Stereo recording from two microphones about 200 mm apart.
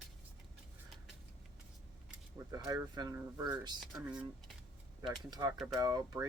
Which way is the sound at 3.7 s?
Centre (ahead or behind).